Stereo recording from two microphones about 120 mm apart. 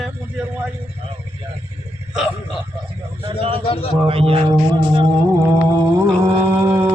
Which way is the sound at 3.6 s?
50° left (ahead or behind).